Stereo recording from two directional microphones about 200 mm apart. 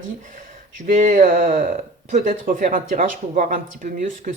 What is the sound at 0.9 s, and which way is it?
Speech, 40° right (ahead or behind).